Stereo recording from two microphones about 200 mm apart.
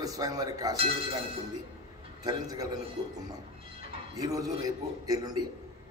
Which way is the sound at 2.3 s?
20° right (ahead or behind).